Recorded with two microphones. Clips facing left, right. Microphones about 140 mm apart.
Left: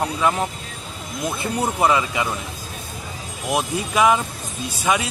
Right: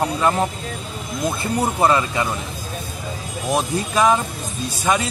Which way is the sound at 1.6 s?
5° left (ahead or behind).